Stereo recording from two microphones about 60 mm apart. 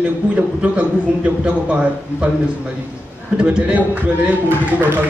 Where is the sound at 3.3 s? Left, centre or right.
Centre.